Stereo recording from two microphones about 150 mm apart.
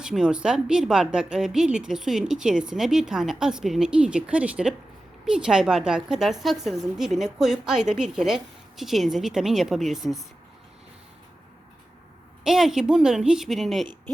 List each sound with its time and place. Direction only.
0.0 s a woman's voice: 5° right (ahead or behind)
12.5 s a woman's voice: centre (ahead or behind)